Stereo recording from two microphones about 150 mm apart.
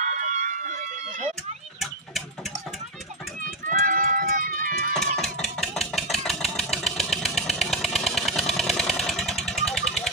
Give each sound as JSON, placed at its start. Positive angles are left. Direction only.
{"t": 0.0, "sound": "a sound", "side_deg": -60}
{"t": 3.4, "sound": "run", "side_deg": -70}
{"t": 4.9, "sound": "engine", "side_deg": 5}